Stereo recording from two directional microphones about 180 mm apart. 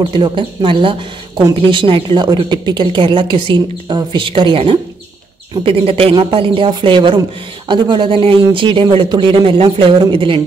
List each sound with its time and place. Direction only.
0.1 s a woman's voice: 25° right (ahead or behind)